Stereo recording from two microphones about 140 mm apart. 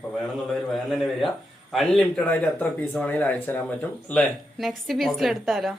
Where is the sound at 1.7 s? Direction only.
5° left (ahead or behind).